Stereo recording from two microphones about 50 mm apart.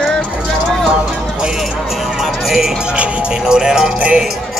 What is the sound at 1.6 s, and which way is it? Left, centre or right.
Music, centre.